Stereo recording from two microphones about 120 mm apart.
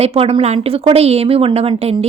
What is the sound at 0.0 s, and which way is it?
A woman's voice, 55° right (ahead or behind).